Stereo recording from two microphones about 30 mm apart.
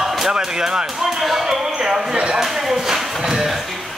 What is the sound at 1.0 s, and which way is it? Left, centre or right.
Speech, centre.